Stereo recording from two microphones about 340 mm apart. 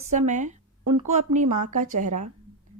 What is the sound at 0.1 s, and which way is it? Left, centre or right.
A woman's voice, right.